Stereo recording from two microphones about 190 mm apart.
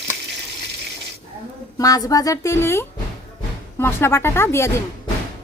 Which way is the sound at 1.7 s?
20° left (ahead or behind).